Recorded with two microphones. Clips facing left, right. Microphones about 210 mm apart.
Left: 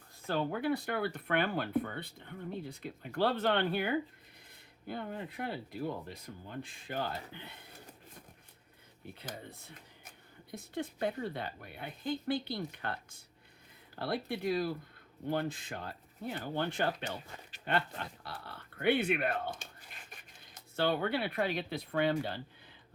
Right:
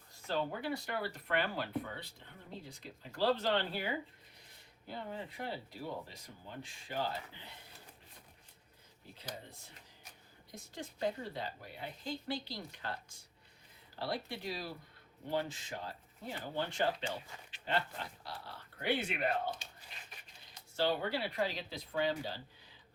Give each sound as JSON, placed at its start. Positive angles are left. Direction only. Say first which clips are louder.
{"t": 0.3, "sound": "speech", "louder": "left 4 dB", "side_deg": 55}
{"t": 9.1, "sound": "speech", "louder": "left 1 dB", "side_deg": 55}